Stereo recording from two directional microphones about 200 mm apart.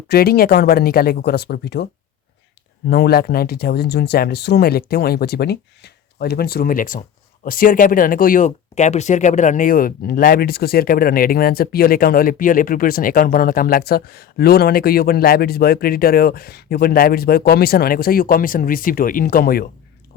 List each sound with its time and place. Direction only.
0.1 s speech: 50° left (ahead or behind)